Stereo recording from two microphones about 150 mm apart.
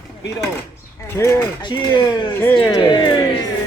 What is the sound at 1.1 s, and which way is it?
Speech, 20° left (ahead or behind).